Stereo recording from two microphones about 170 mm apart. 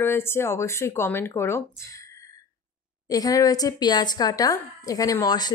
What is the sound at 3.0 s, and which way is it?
A woman's voice, 20° left (ahead or behind).